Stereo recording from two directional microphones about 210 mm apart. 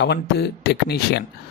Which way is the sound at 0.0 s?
50° left (ahead or behind).